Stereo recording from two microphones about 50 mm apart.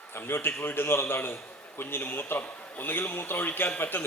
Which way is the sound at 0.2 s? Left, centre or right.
Left.